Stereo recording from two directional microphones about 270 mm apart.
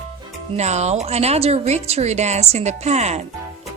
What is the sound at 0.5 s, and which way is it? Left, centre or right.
A woman's voice, right.